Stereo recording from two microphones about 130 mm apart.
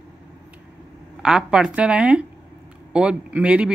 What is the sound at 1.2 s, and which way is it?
Speech, 5° right (ahead or behind).